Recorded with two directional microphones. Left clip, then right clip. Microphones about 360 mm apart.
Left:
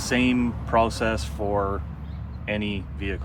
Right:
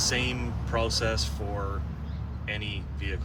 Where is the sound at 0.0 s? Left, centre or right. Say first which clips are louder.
Left 5 dB; centre.